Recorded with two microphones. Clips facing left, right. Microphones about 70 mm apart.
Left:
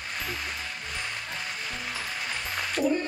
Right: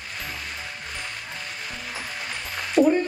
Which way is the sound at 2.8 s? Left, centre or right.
Centre.